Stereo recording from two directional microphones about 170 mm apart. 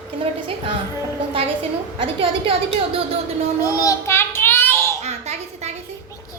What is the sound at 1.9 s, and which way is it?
A woman's voice, 35° right (ahead or behind).